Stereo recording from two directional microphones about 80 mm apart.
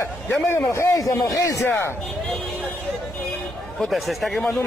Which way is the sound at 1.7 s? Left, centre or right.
Left.